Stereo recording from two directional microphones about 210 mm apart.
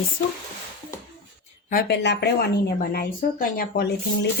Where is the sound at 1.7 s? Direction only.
50° left (ahead or behind).